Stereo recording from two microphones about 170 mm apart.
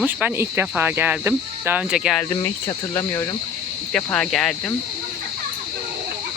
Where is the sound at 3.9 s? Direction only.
5° left (ahead or behind).